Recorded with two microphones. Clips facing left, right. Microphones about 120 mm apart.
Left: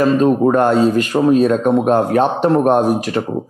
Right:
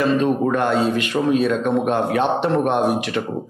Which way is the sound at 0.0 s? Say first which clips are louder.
Left 5 dB; 40° left (ahead or behind).